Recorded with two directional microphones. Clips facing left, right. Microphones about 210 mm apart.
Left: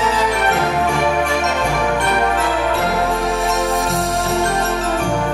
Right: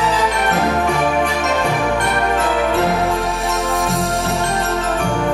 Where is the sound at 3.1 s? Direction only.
Centre (ahead or behind).